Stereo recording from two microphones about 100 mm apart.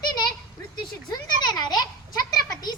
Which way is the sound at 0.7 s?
40° left (ahead or behind).